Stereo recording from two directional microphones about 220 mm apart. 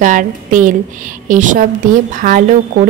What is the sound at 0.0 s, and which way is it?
A woman's voice, 35° right (ahead or behind).